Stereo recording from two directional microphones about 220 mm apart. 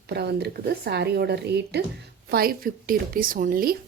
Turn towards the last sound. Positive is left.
turn(degrees=-40)  # may be behind; listen again after turning